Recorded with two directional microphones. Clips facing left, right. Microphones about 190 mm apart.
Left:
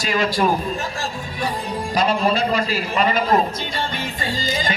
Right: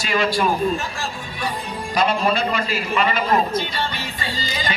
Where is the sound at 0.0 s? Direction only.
40° left (ahead or behind).